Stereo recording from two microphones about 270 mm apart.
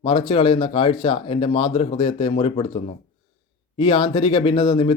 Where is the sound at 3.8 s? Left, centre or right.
Centre.